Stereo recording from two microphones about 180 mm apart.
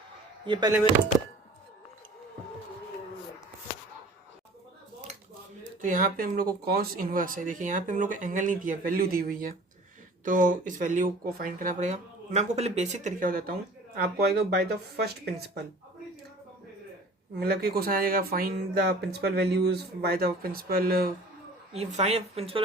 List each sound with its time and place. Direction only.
0.4 s speech: 25° right (ahead or behind)
5.1 s dishes: 40° right (ahead or behind)
5.8 s speech: 45° right (ahead or behind)
17.4 s speech: 60° right (ahead or behind)
21.7 s a woman's voice: 35° right (ahead or behind)